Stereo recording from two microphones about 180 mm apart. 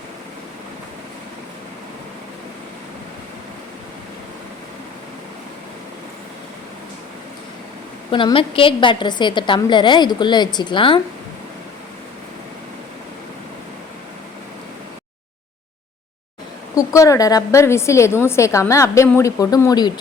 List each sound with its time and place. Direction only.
8.1 s a woman's voice: 30° left (ahead or behind)
16.7 s a woman's voice: 20° left (ahead or behind)